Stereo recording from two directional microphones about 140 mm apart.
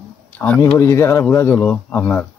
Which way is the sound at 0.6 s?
20° left (ahead or behind).